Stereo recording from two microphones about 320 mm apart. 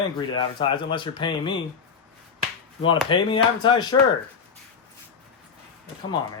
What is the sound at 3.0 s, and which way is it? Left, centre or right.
Speech, centre.